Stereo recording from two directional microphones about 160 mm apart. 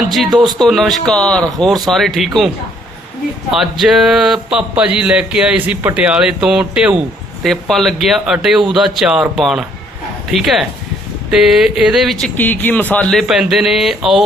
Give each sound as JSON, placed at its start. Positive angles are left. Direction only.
{"t": 0.4, "sound": "speech", "side_deg": 0}
{"t": 3.5, "sound": "speech", "side_deg": 0}